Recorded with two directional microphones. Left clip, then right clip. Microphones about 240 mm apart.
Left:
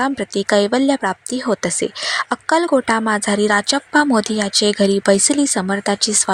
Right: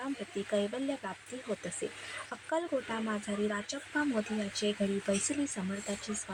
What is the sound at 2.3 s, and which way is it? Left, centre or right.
Speech, left.